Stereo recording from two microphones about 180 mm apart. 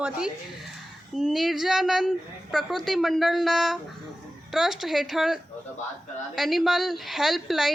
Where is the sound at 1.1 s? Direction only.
Centre (ahead or behind).